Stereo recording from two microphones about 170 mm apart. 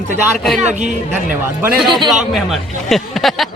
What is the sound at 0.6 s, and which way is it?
Speech, 45° right (ahead or behind).